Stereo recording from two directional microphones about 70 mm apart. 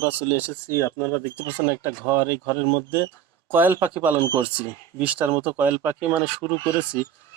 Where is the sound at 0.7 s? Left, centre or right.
Left.